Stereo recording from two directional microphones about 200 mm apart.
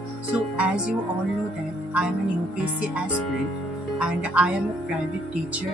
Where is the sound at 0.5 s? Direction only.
5° right (ahead or behind).